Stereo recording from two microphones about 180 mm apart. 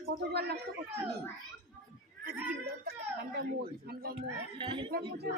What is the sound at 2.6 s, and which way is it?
Speech, 60° right (ahead or behind).